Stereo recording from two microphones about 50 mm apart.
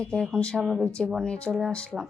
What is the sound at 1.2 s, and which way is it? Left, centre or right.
Speech, left.